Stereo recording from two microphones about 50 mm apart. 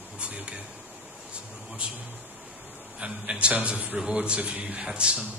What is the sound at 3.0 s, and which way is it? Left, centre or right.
A man's voice, right.